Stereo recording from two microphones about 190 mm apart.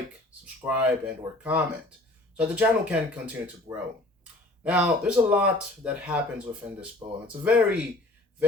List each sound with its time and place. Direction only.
0.4 s speech: 10° right (ahead or behind)
7.0 s speech: 25° right (ahead or behind)
7.4 s speech: 5° right (ahead or behind)